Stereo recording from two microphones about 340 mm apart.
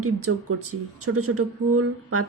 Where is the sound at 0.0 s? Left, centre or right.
Right.